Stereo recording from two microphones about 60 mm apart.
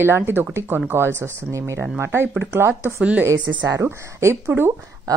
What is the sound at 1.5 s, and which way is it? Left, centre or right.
Speech, right.